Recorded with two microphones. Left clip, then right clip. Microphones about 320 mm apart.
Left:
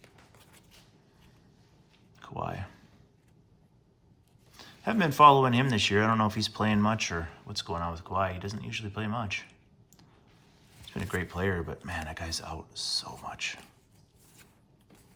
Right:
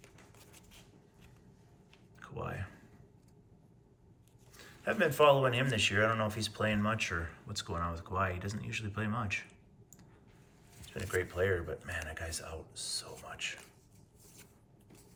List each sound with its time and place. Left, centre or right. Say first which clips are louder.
2.1 s a sound: left 6 dB; centre
4.5 s speech: left 3 dB; centre
10.8 s speech: left 1 dB; centre